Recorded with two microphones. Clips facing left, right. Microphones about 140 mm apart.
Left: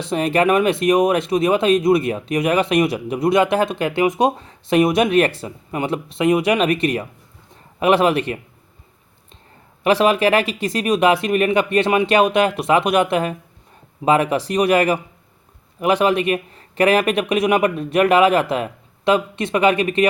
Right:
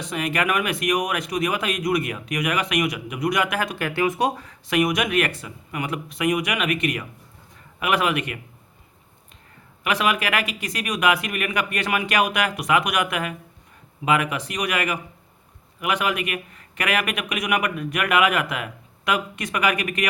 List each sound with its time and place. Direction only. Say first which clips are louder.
0.0 s speech: left 8 dB; 30° left (ahead or behind)
9.8 s speech: left 8 dB; 30° left (ahead or behind)